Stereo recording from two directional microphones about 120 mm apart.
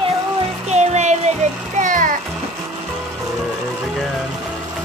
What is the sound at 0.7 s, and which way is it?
Music, 70° right (ahead or behind).